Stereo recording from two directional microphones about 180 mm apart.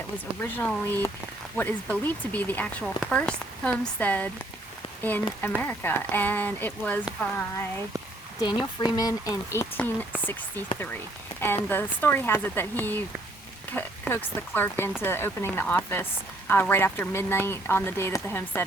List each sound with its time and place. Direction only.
0.4 s a woman's voice: 10° left (ahead or behind)
5.4 s a woman's voice: 10° left (ahead or behind)
8.4 s speech: 20° left (ahead or behind)
11.3 s a woman's voice: 10° left (ahead or behind)